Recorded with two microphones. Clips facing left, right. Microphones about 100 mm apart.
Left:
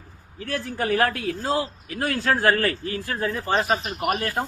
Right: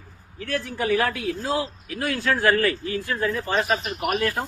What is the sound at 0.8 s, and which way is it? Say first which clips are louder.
A woman's voice: left 1 dB; 45° left (ahead or behind).